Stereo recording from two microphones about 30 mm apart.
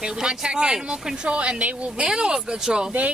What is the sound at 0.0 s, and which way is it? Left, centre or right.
Speech, right.